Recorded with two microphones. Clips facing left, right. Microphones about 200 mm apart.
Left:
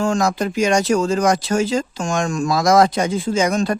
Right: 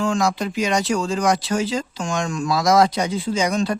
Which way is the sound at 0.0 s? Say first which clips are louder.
Left 2 dB; 45° left (ahead or behind).